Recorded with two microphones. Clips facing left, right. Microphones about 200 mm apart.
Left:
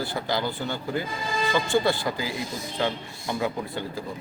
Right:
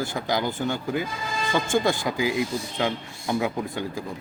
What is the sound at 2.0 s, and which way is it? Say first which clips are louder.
Speech: right 5 dB; 15° right (ahead or behind).